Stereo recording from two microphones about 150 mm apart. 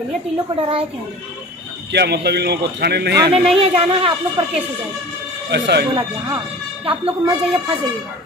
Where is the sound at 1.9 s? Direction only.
90° right.